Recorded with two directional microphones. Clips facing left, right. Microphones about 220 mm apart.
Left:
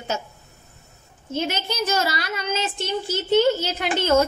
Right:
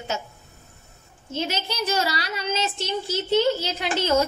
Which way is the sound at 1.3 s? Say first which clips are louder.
Left 2 dB; 50° left (ahead or behind).